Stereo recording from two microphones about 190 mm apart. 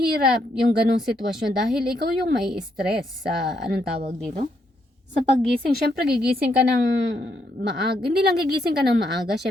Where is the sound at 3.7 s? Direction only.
60° right (ahead or behind).